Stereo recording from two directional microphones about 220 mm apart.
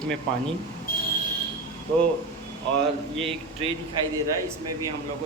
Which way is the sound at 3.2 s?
25° right (ahead or behind).